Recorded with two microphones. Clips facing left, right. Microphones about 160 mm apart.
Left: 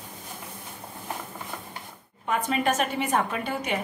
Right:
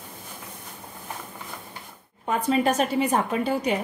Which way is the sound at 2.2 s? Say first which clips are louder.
Right 3 dB; 35° right (ahead or behind).